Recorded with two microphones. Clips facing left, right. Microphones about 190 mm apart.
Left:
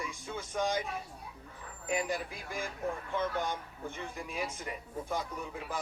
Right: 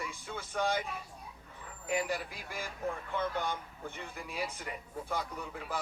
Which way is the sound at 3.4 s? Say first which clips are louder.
Left 1 dB; 15° left (ahead or behind).